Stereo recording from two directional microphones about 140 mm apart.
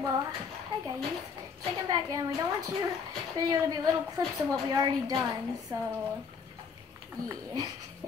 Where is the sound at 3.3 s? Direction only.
30° right (ahead or behind).